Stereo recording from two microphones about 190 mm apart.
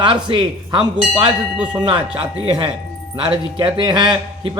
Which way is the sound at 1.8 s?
25° right (ahead or behind).